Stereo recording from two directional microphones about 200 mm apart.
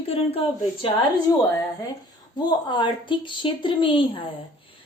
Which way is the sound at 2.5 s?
20° left (ahead or behind).